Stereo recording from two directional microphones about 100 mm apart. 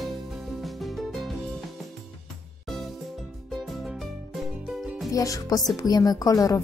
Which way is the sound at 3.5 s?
Centre (ahead or behind).